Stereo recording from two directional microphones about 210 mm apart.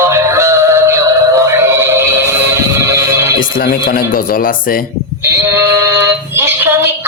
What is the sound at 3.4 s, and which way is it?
Speech, 40° left (ahead or behind).